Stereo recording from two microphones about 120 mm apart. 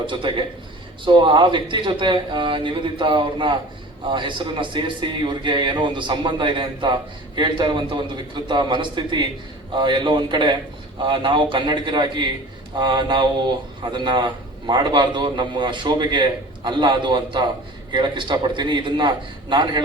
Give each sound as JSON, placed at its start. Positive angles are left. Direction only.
{"t": 0.0, "sound": "a man's voice", "side_deg": -45}